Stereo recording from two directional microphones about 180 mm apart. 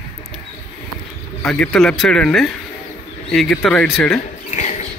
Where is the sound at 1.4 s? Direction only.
5° left (ahead or behind).